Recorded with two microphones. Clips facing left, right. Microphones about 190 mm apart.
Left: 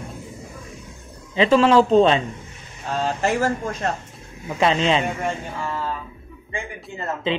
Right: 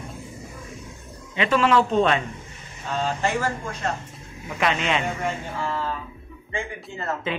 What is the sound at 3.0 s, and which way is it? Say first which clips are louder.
Speech: left 4 dB; 40° left (ahead or behind).